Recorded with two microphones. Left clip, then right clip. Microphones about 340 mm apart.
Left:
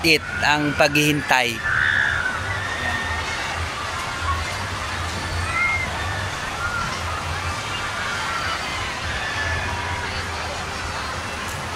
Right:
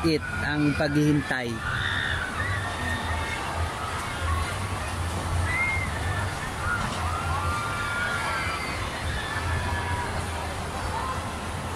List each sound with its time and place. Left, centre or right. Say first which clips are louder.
0.0 s speech: left 8 dB; left